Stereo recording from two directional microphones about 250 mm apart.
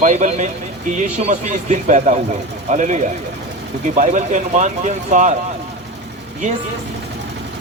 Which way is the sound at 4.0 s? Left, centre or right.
Right.